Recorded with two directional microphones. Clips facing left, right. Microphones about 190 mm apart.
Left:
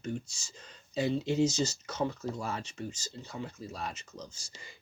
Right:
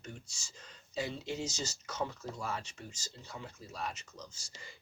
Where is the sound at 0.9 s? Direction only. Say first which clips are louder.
Left 9 dB; 25° left (ahead or behind).